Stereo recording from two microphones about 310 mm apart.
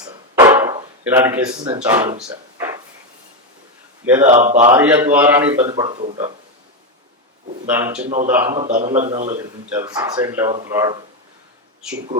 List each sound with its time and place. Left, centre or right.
0.0 s a sound: centre
4.0 s a man's voice: centre
4.3 s speech: right
4.7 s a man's voice: centre
7.7 s a man's voice: centre
8.5 s speech: right
9.4 s a man's voice: centre